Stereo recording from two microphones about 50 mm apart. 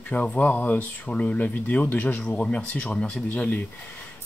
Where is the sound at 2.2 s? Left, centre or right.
Left.